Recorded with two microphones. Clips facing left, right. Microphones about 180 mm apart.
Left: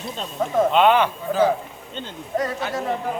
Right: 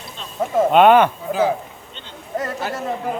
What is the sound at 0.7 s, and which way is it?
Speech, 55° right (ahead or behind).